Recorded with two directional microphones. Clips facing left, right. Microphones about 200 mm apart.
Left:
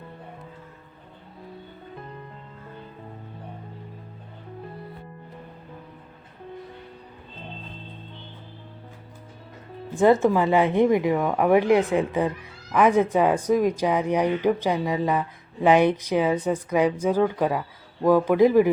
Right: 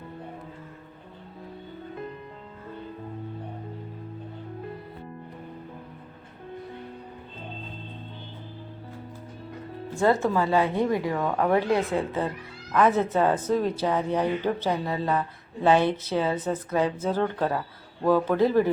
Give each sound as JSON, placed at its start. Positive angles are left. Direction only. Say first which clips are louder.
{"t": 9.9, "sound": "speech", "louder": "left 5 dB", "side_deg": 15}